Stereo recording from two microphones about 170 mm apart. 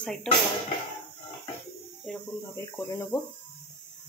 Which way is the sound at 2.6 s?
15° left (ahead or behind).